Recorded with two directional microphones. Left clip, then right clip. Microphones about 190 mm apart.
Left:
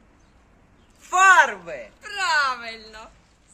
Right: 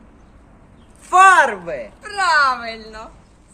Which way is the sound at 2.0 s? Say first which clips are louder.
Right 6 dB; 15° left (ahead or behind).